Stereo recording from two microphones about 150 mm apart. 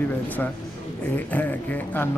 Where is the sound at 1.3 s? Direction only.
10° left (ahead or behind).